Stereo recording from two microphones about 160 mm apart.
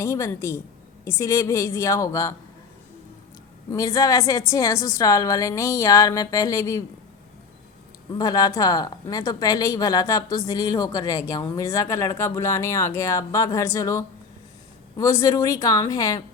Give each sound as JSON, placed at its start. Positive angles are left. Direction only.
{"t": 0.0, "sound": "a woman's voice", "side_deg": 20}
{"t": 3.7, "sound": "a woman's voice", "side_deg": 20}
{"t": 8.2, "sound": "a woman's voice", "side_deg": 25}